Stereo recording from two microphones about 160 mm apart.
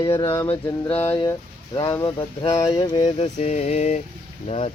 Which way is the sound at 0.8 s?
10° left (ahead or behind).